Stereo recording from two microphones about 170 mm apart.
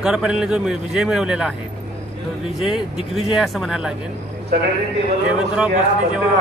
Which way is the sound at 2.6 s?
5° right (ahead or behind).